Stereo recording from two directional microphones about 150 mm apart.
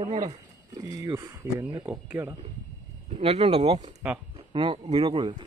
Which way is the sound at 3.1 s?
40° right (ahead or behind).